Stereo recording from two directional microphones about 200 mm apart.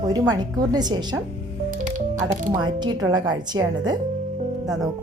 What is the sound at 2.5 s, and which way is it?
Speech, 20° right (ahead or behind).